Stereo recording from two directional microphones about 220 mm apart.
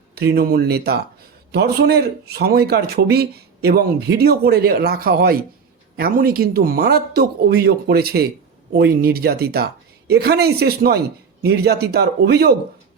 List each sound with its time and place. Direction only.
0.3 s speech: 45° right (ahead or behind)